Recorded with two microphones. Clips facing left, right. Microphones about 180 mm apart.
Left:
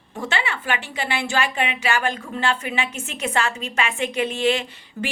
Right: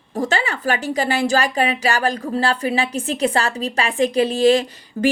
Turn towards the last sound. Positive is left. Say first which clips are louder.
# right 8 dB
turn(degrees=-40)  # may be behind; listen again after turning